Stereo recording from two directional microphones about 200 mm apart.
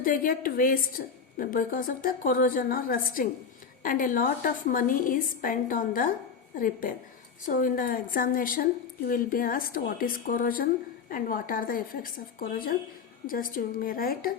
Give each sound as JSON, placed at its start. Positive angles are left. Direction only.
{"t": 0.0, "sound": "a woman's voice", "side_deg": 45}